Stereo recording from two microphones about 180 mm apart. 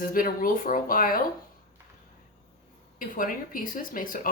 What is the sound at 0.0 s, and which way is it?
Speech, 50° left (ahead or behind).